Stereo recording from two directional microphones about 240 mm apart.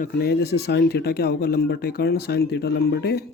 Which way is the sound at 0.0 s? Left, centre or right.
Left.